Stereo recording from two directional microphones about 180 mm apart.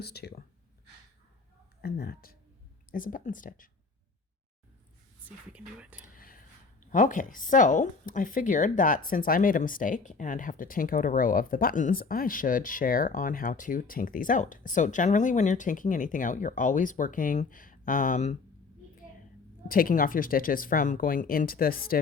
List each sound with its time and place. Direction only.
0.0 s speech: 65° left (ahead or behind)
1.8 s speech: 60° left (ahead or behind)
5.5 s speech: 5° right (ahead or behind)
6.0 s whispering: 50° left (ahead or behind)
6.9 s speech: 45° left (ahead or behind)
19.6 s speech: 50° left (ahead or behind)